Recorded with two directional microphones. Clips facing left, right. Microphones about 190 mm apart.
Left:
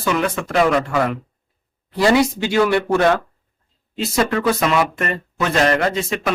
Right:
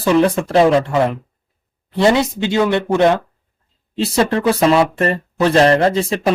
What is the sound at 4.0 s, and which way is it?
Speech, 30° right (ahead or behind).